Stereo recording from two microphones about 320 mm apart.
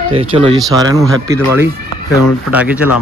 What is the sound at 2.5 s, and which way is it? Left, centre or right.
Speech, centre.